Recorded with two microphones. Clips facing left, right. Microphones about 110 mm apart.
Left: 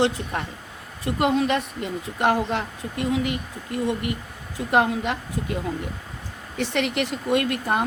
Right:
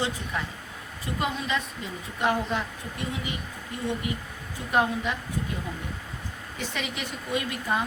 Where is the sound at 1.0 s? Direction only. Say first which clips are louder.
Left 9 dB; 70° left (ahead or behind).